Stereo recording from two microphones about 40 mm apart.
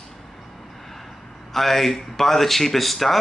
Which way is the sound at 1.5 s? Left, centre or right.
Centre.